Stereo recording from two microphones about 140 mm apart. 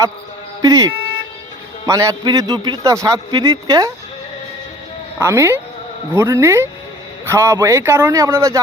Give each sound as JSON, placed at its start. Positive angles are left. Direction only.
{"t": 0.6, "sound": "speech", "side_deg": -25}
{"t": 5.2, "sound": "speech", "side_deg": -20}